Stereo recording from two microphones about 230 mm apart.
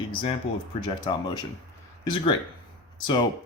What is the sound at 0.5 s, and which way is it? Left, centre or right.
Speech, left.